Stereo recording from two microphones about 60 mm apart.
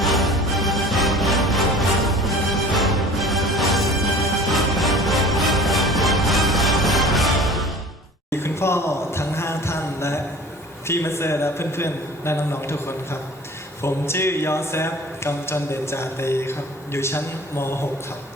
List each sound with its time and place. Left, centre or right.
0.0 s music: centre
8.3 s a sound: left
10.8 s speech: left